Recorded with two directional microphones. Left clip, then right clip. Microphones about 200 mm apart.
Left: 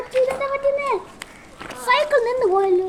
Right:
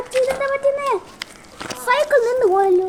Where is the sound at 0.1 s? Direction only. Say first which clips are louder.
Right 1 dB; 65° right (ahead or behind).